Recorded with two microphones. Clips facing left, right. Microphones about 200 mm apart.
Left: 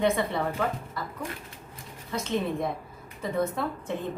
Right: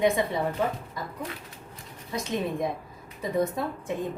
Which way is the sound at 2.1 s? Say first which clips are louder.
Left 1 dB; 15° right (ahead or behind).